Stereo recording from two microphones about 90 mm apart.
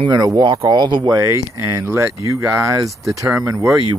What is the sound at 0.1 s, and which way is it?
Speech, 50° right (ahead or behind).